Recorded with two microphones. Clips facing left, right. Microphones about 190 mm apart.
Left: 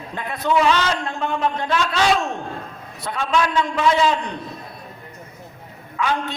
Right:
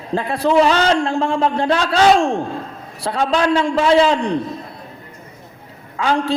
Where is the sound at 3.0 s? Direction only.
35° right (ahead or behind).